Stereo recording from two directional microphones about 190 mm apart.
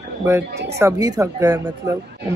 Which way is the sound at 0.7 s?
15° right (ahead or behind).